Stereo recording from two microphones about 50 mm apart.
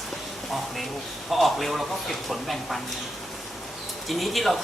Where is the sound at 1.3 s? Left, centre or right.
Centre.